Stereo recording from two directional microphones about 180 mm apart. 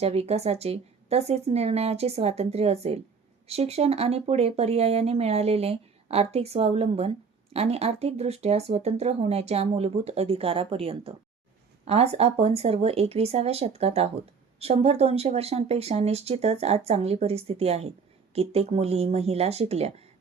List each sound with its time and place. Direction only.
0.0 s speech: 35° right (ahead or behind)